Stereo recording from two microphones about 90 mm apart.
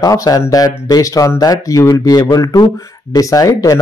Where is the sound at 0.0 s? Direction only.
45° left (ahead or behind).